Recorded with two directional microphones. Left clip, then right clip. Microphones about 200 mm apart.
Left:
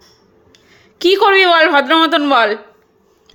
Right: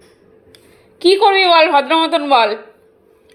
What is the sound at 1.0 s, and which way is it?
A woman's voice, 45° left (ahead or behind).